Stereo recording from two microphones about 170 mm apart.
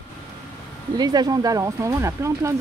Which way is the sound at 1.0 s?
25° right (ahead or behind).